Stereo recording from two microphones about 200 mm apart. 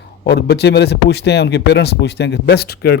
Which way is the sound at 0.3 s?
55° left (ahead or behind).